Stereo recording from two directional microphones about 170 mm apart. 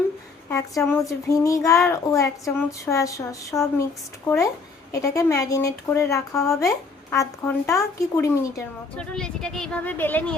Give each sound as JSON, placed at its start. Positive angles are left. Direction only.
{"t": 0.5, "sound": "speech", "side_deg": 20}
{"t": 9.0, "sound": "speech", "side_deg": 5}